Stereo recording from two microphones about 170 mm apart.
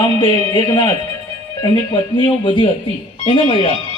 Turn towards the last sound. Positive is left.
turn(degrees=30)  # may be behind; listen again after turning